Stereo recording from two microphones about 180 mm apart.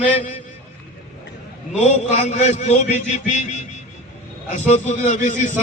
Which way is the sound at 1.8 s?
40° left (ahead or behind).